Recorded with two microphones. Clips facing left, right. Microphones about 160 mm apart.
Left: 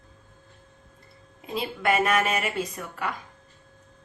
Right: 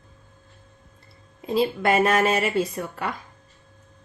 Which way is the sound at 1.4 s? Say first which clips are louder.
Right 6 dB; 35° right (ahead or behind).